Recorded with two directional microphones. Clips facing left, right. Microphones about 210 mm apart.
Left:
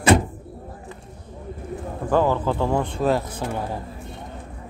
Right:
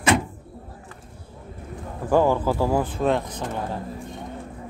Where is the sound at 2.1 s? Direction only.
10° right (ahead or behind); by 3.8 s 10° left (ahead or behind).